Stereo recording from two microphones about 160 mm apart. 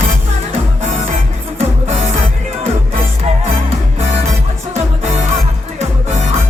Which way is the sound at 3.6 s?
40° right (ahead or behind).